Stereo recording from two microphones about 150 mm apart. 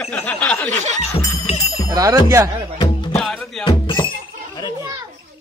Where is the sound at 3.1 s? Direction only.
5° left (ahead or behind).